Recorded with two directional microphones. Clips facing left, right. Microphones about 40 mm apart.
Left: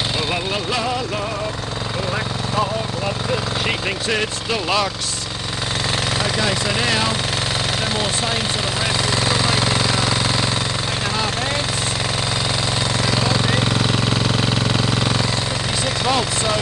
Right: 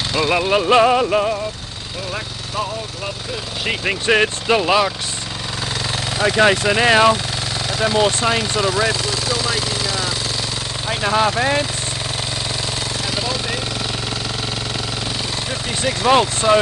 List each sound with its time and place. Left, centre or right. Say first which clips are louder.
0.2 s speech: right 6 dB; right
3.8 s speech: right 5 dB; right
4.6 s speech: right 1 dB; centre
6.2 s speech: right 6 dB; right
6.7 s speech: right 7 dB; right
9.1 s vehicle: left 2 dB; left
11.1 s speech: right 9 dB; right
16.0 s speech: right 7 dB; right